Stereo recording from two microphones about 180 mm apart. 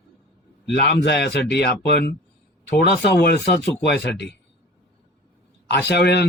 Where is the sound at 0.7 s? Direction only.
65° left (ahead or behind).